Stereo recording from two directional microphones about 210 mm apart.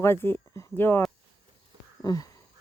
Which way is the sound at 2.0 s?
15° left (ahead or behind).